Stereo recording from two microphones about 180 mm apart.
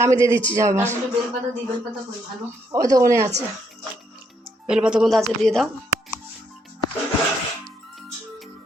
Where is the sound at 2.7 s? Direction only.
20° right (ahead or behind).